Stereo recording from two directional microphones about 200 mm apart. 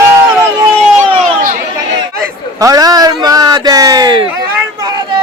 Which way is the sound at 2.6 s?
15° right (ahead or behind).